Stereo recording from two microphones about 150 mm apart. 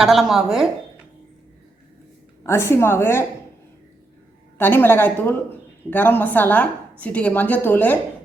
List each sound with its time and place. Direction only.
0.0 s speech: centre (ahead or behind)
2.5 s a woman's voice: 15° left (ahead or behind)
4.5 s a woman's voice: 15° left (ahead or behind)